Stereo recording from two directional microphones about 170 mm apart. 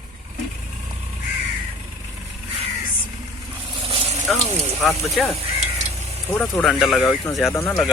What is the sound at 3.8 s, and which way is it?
Vehicle, 35° right (ahead or behind).